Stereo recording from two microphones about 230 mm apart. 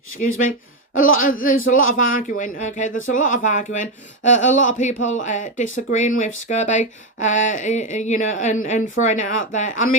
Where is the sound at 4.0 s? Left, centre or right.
Left.